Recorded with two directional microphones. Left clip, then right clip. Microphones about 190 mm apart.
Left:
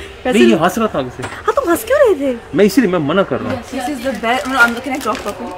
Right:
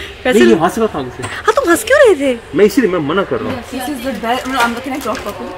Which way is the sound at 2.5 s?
70° left (ahead or behind).